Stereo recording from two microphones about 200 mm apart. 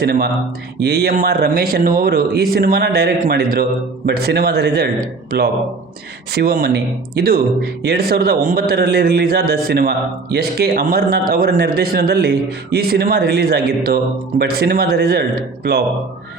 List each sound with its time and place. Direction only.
0.0 s speech: 55° right (ahead or behind)